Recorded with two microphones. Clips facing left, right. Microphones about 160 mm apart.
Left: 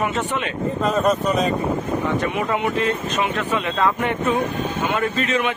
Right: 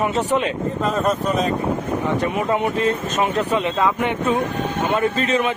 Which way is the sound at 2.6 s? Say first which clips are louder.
Right 1 dB; 40° right (ahead or behind).